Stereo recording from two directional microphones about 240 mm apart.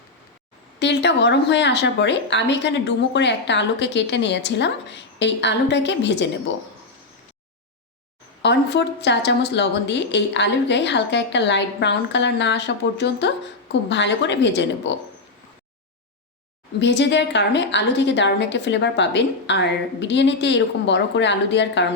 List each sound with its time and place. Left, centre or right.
0.8 s a woman's voice: left
8.4 s a woman's voice: left
16.8 s a woman's voice: left